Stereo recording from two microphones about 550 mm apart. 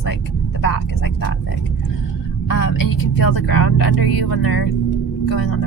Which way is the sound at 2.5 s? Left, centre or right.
Left.